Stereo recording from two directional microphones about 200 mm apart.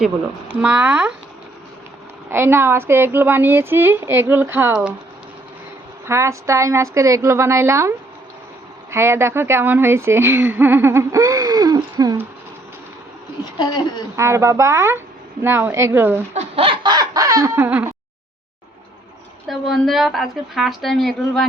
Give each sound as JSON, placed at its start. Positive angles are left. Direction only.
{"t": 0.6, "sound": "a woman's voice", "side_deg": -5}
{"t": 2.3, "sound": "a woman's voice", "side_deg": -10}
{"t": 6.1, "sound": "a woman's voice", "side_deg": -15}
{"t": 13.6, "sound": "speech", "side_deg": 20}
{"t": 14.2, "sound": "a woman's voice", "side_deg": -15}
{"t": 16.3, "sound": "a sound", "side_deg": -30}
{"t": 19.5, "sound": "a woman's voice", "side_deg": 0}